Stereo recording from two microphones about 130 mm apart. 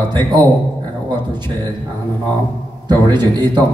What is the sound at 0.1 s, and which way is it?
A man's voice, 35° right (ahead or behind).